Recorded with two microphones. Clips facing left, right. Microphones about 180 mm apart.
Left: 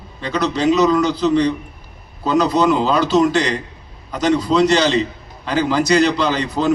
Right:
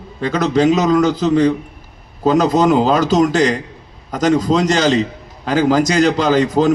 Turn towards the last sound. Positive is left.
turn(degrees=-45)  # may be behind; listen again after turning